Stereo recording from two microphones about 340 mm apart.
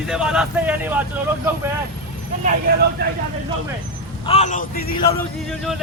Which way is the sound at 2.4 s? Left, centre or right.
Right.